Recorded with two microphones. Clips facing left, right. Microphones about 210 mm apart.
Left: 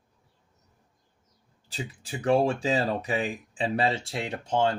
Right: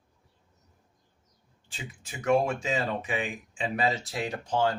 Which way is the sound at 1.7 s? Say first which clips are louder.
Left 7 dB; 35° left (ahead or behind).